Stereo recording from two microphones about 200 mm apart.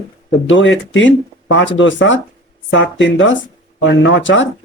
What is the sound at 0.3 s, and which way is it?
Speech, 65° left (ahead or behind).